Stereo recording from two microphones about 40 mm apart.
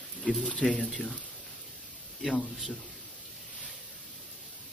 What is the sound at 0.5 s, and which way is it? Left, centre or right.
Speech, left.